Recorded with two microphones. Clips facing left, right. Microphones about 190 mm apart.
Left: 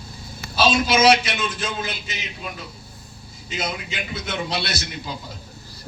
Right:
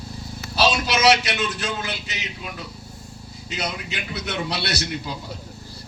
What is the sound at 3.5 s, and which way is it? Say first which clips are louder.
A man's voice: left 1 dB; 70° right (ahead or behind).